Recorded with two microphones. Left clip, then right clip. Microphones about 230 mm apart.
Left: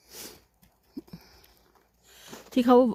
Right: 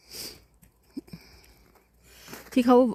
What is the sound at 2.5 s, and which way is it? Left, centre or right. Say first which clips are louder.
Speech: even; centre.